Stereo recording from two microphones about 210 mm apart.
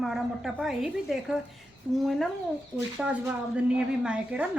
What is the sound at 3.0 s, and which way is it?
A woman's voice, 5° right (ahead or behind).